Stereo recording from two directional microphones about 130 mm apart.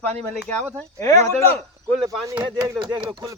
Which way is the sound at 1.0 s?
20° left (ahead or behind).